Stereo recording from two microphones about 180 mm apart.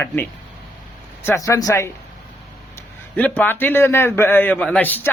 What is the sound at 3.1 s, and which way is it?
A man's voice, 10° left (ahead or behind).